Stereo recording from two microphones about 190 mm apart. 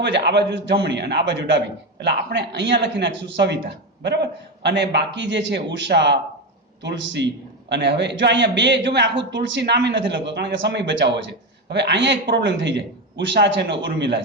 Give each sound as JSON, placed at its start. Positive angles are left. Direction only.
{"t": 0.0, "sound": "a man's voice", "side_deg": -65}